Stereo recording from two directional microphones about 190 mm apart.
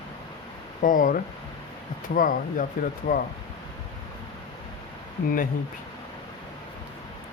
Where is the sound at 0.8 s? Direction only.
45° left (ahead or behind).